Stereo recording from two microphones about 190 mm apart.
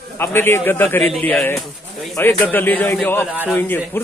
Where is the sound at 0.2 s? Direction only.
10° left (ahead or behind).